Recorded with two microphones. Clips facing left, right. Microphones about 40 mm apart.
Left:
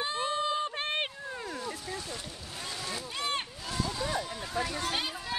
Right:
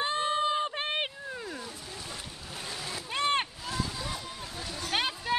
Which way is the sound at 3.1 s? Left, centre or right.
Right.